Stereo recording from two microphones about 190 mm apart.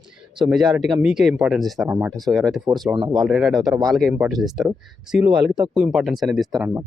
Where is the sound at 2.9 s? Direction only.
20° right (ahead or behind).